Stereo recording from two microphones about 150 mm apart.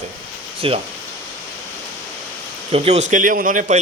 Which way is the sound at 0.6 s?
40° right (ahead or behind).